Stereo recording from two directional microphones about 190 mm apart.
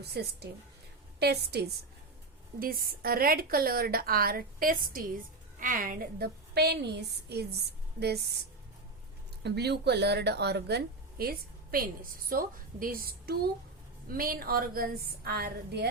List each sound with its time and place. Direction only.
0.0 s a woman's voice: 60° right (ahead or behind)
9.4 s a woman's voice: 60° right (ahead or behind)